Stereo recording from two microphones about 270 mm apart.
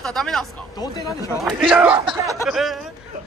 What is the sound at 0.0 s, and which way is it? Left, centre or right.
Speech, centre.